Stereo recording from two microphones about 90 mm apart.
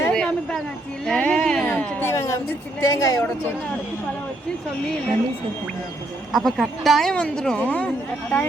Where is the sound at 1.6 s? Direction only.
20° left (ahead or behind).